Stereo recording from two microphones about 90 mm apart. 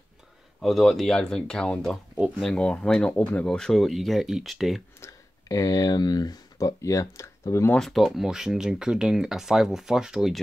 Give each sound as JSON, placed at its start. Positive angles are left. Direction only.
{"t": 0.6, "sound": "speech", "side_deg": 0}
{"t": 5.0, "sound": "speech", "side_deg": 35}
{"t": 7.7, "sound": "speech", "side_deg": 0}